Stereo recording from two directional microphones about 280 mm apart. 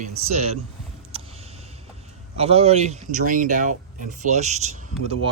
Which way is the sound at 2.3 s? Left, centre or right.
Right.